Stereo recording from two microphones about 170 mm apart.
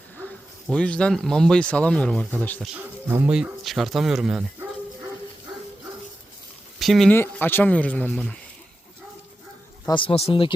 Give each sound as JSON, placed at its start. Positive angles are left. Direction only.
{"t": 0.7, "sound": "speech", "side_deg": 5}
{"t": 2.7, "sound": "speech", "side_deg": -10}
{"t": 6.7, "sound": "a sound", "side_deg": 0}
{"t": 7.1, "sound": "speech", "side_deg": 10}
{"t": 9.9, "sound": "speech", "side_deg": 30}